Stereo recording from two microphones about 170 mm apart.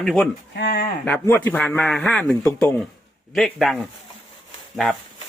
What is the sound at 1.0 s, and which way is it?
A man's voice, 10° left (ahead or behind).